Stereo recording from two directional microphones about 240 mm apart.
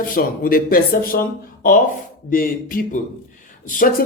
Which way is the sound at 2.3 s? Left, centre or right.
Left.